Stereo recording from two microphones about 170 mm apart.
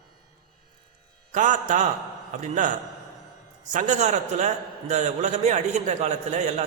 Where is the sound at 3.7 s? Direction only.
45° right (ahead or behind).